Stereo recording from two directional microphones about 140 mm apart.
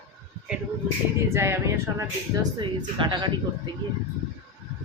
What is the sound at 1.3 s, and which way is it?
Speech, 20° right (ahead or behind).